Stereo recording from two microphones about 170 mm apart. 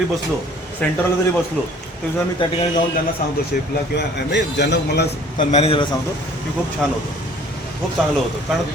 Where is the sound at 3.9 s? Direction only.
90° left.